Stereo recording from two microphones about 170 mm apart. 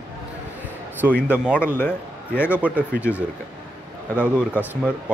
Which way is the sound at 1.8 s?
10° left (ahead or behind).